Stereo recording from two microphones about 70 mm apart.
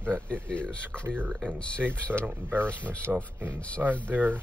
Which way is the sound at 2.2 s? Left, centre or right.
Right.